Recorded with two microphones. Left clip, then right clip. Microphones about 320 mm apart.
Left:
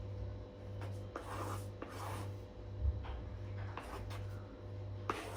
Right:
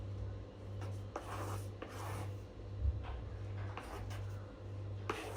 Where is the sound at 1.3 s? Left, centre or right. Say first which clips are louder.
Left 1 dB; centre.